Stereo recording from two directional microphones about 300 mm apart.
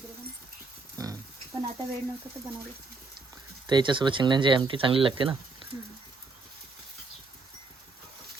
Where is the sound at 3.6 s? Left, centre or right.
Centre.